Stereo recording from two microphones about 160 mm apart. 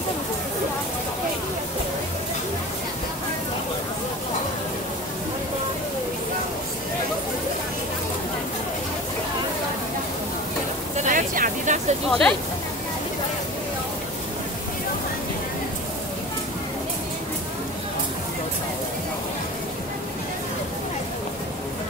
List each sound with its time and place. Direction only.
11.0 s vehicle: 55° right (ahead or behind)
12.1 s speech: 5° left (ahead or behind)